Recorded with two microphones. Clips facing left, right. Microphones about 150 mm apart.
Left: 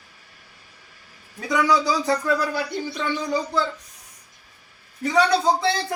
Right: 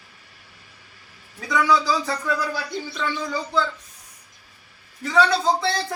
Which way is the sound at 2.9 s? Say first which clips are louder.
Left 2 dB; 15° left (ahead or behind).